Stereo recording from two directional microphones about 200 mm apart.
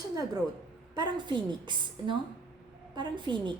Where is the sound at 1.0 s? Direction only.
25° right (ahead or behind).